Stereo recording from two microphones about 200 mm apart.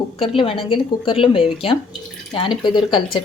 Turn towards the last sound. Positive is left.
turn(degrees=25)  # may be behind; listen again after turning